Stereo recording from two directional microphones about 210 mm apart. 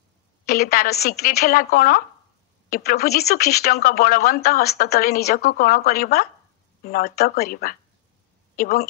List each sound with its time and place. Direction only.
0.5 s speech: 45° left (ahead or behind)